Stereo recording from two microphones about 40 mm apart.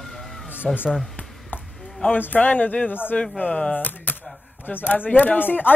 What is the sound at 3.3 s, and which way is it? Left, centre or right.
Speech, left.